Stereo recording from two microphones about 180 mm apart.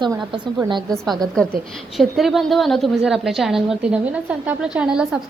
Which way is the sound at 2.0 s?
Centre (ahead or behind).